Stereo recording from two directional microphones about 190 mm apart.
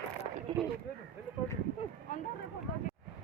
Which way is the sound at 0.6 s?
5° right (ahead or behind).